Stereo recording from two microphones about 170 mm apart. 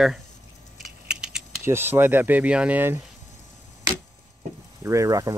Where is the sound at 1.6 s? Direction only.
15° right (ahead or behind).